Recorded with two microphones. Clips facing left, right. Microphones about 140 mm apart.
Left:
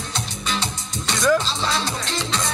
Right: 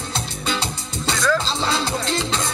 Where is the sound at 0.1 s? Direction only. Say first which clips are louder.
Right 2 dB; 30° right (ahead or behind).